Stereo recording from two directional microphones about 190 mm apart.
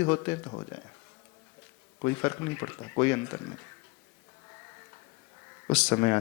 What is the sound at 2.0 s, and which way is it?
A man's voice, 10° left (ahead or behind).